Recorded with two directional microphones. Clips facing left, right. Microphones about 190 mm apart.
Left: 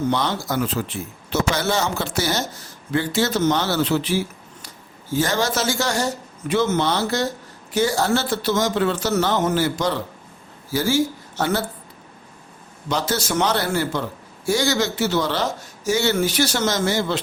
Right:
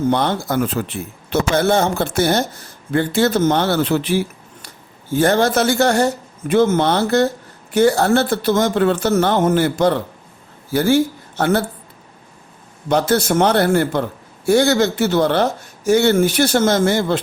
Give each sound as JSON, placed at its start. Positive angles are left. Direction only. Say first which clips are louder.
{"t": 0.1, "sound": "speech", "louder": "right 4 dB", "side_deg": -55}
{"t": 12.9, "sound": "speech", "louder": "right 7 dB", "side_deg": -55}